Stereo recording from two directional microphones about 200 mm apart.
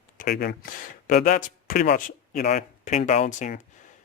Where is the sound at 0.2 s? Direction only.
45° left (ahead or behind).